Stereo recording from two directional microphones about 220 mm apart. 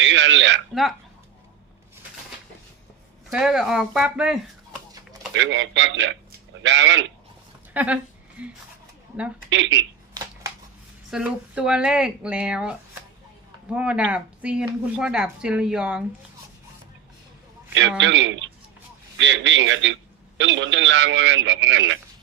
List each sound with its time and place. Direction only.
0.0 s a sound: 55° right (ahead or behind)
0.7 s speech: centre (ahead or behind)
3.3 s speech: 5° right (ahead or behind)
5.3 s speech: 60° right (ahead or behind)
7.7 s speech: 5° right (ahead or behind)
9.5 s speech: 55° right (ahead or behind)
11.1 s speech: 5° right (ahead or behind)
17.7 s speech: 55° right (ahead or behind)